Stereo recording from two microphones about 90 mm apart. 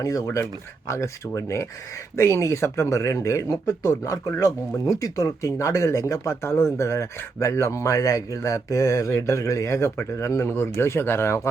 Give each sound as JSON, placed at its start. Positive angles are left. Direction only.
{"t": 0.0, "sound": "speech", "side_deg": 40}